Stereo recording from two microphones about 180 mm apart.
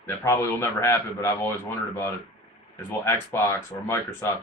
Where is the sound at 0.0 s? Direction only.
15° left (ahead or behind).